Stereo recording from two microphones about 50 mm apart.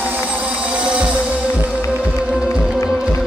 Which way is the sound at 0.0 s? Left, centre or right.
Right.